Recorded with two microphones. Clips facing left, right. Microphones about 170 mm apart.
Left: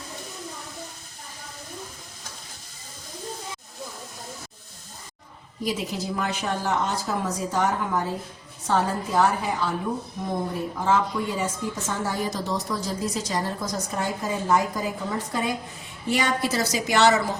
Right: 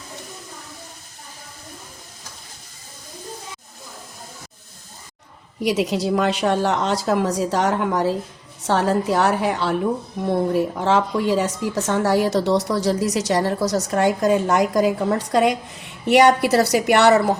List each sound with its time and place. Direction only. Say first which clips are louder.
5.6 s a woman's voice: right 8 dB; 80° right; by 17.3 s 60° right (ahead or behind)